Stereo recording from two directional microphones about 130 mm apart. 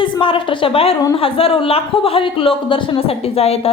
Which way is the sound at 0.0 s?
40° left (ahead or behind).